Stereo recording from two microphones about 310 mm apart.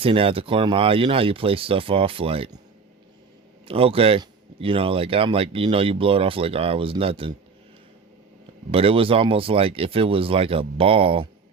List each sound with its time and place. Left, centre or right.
0.0 s speech: centre
3.7 s speech: centre
8.7 s speech: centre